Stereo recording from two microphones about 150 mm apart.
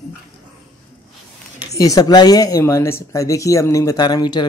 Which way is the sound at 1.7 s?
25° left (ahead or behind).